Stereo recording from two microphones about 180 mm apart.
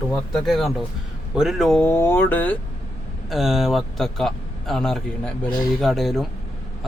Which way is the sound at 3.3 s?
Centre (ahead or behind).